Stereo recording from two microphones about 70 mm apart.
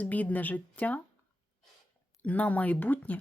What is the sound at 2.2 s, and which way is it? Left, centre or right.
Speech, left.